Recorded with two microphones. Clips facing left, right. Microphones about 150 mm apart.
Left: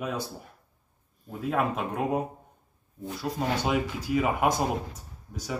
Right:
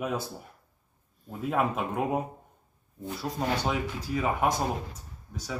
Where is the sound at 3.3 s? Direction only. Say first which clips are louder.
Left 2 dB; centre (ahead or behind).